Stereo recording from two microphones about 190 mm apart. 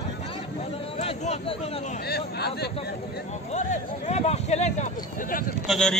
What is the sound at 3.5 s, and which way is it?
Speech, 35° left (ahead or behind).